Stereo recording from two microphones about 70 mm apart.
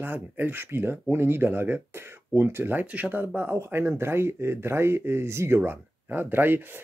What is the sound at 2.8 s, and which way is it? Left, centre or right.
Speech, right.